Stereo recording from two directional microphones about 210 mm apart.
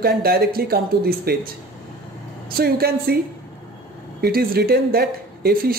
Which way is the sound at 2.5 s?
45° right (ahead or behind).